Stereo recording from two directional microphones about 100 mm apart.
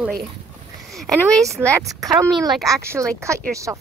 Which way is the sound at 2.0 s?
35° right (ahead or behind).